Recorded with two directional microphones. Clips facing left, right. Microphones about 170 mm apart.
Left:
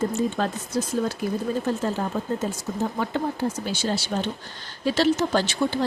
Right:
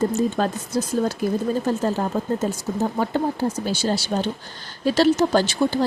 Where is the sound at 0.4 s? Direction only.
40° right (ahead or behind).